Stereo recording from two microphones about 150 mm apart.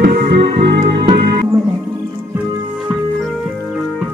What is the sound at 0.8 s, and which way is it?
Music, 35° right (ahead or behind).